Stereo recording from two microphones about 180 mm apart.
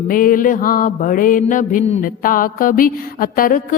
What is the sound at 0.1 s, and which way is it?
Mantra, 50° left (ahead or behind).